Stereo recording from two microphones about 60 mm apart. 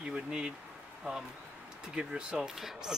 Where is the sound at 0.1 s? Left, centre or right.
Centre.